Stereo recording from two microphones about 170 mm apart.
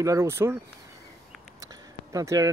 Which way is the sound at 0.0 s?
15° right (ahead or behind).